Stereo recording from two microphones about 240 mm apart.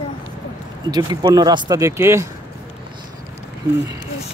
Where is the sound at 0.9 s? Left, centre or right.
Centre.